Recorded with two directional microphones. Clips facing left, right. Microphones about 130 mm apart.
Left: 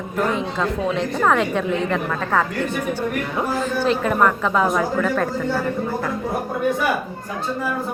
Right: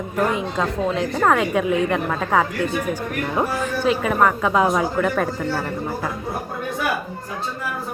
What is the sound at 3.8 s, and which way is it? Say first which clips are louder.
A woman's voice: even; 5° right (ahead or behind).